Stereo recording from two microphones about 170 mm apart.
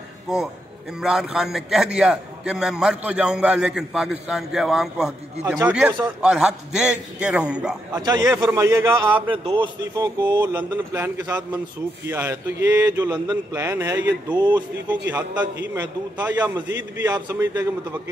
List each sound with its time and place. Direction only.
0.3 s a man's voice: 5° right (ahead or behind)
7.9 s speech: 25° right (ahead or behind)
8.3 s a man's voice: centre (ahead or behind)
8.5 s speech: 15° right (ahead or behind)
9.1 s speech: 30° right (ahead or behind)
10.3 s speech: 15° right (ahead or behind)
15.0 s speech: 10° right (ahead or behind)